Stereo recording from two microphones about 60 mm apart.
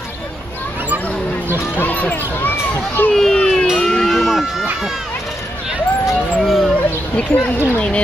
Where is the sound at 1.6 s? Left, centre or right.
Left.